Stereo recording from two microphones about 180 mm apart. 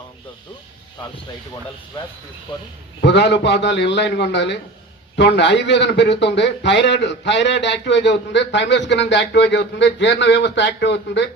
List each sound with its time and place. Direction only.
3.0 s a man's voice: 75° left (ahead or behind)